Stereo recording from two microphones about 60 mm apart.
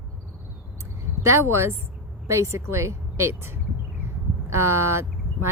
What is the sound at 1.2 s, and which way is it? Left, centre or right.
Speech, right.